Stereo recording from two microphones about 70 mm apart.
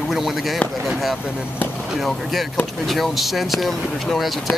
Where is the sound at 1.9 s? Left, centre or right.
Centre.